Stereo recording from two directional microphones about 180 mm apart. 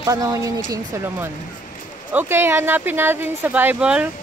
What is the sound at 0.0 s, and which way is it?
Speech, 20° right (ahead or behind).